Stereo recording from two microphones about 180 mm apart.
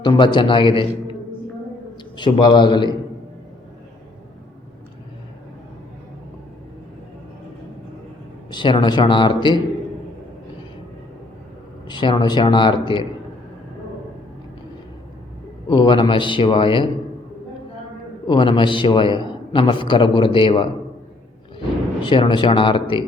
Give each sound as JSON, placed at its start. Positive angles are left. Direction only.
{"t": 0.0, "sound": "a man's voice", "side_deg": 25}
{"t": 2.1, "sound": "a man's voice", "side_deg": 25}
{"t": 8.5, "sound": "a man's voice", "side_deg": 25}
{"t": 11.9, "sound": "a man's voice", "side_deg": 25}
{"t": 15.7, "sound": "a man's voice", "side_deg": 25}
{"t": 18.3, "sound": "a man's voice", "side_deg": 25}
{"t": 22.0, "sound": "a man's voice", "side_deg": 25}